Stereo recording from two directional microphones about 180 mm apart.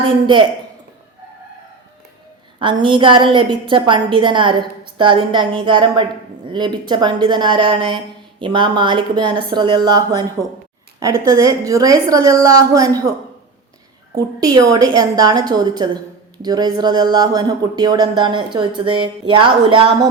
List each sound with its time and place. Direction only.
2.8 s speech: 25° right (ahead or behind)
14.4 s speech: 20° right (ahead or behind)